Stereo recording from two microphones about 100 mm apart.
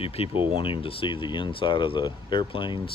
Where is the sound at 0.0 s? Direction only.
75° left (ahead or behind).